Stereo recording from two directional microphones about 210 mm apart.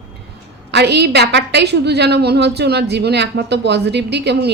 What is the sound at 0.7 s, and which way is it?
A woman's voice, 55° right (ahead or behind).